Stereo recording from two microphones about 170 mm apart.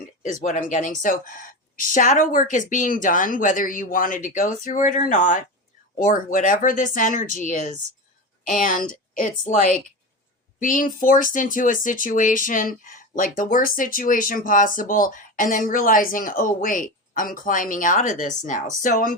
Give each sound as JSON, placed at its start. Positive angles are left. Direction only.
{"t": 0.2, "sound": "speech", "side_deg": 45}
{"t": 10.6, "sound": "speech", "side_deg": 55}